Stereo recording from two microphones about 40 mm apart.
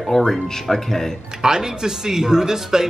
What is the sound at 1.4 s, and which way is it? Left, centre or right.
Speech, centre.